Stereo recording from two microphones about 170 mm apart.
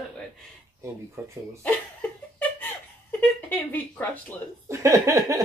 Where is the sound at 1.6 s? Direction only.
10° left (ahead or behind).